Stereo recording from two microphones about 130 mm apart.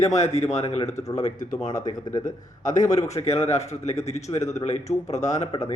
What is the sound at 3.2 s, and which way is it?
Speech, 55° left (ahead or behind).